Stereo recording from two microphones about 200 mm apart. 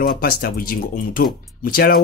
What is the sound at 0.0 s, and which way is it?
Speech, 50° left (ahead or behind).